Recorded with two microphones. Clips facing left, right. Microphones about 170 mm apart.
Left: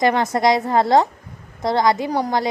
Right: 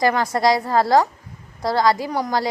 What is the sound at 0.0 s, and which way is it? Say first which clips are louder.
A woman's voice: left 1 dB; 20° left (ahead or behind).